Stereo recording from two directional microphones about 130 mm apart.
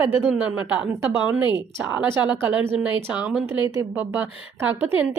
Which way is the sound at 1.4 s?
35° left (ahead or behind).